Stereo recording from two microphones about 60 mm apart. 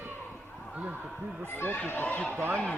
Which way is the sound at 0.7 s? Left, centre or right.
Right.